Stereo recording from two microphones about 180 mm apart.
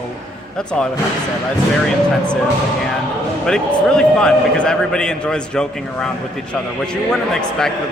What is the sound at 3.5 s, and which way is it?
A man's voice, 5° left (ahead or behind).